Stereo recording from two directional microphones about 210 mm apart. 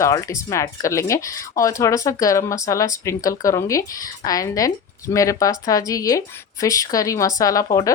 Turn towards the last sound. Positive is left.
turn(degrees=15)  # may be behind; listen again after turning